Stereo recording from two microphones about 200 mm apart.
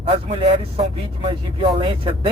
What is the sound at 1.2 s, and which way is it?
Speech, 25° right (ahead or behind).